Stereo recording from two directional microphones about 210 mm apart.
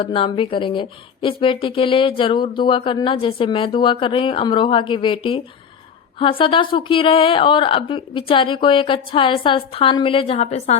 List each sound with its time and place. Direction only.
0.0 s speech: 25° left (ahead or behind)